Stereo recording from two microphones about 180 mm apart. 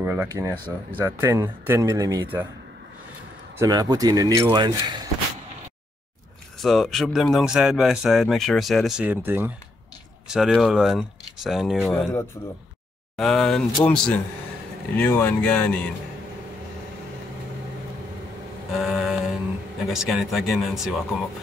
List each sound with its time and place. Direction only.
0.0 s speech: 10° right (ahead or behind)
3.5 s speech: 20° right (ahead or behind)
6.6 s speech: centre (ahead or behind)
13.1 s speech: 5° left (ahead or behind)
18.8 s a sound: centre (ahead or behind)
19.9 s speech: centre (ahead or behind)